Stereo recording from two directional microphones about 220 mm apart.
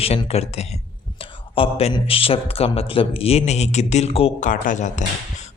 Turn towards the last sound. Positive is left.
turn(degrees=35)  # may be behind; listen again after turning